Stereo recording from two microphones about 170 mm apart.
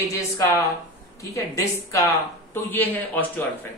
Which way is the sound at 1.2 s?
20° left (ahead or behind).